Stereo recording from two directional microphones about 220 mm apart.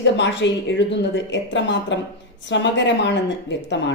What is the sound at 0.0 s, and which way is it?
Speech, 55° left (ahead or behind).